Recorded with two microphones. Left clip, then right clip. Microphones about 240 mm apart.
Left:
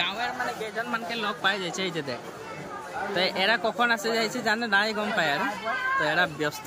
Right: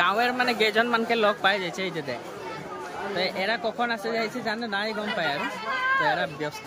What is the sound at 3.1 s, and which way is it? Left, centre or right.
Speech, centre.